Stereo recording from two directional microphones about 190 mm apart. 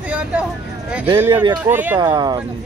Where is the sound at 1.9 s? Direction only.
25° right (ahead or behind).